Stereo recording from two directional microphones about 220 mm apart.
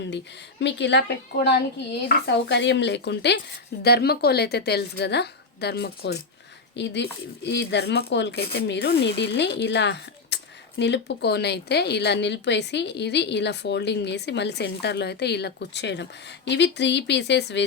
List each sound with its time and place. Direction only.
0.6 s speech: 55° left (ahead or behind)